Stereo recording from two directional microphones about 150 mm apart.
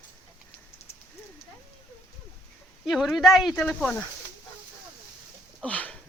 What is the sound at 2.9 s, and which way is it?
Speech, centre (ahead or behind).